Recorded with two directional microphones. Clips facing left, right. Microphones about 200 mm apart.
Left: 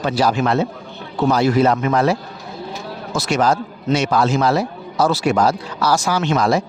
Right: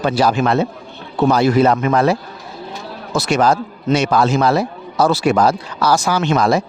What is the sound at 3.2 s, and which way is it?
A man's voice, 60° right (ahead or behind).